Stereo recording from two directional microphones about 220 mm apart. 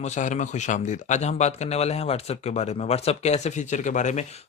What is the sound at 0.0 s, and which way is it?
Speech, 35° left (ahead or behind).